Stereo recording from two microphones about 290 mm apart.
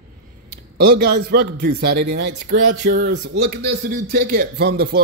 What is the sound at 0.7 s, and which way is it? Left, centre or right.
A man's voice, right.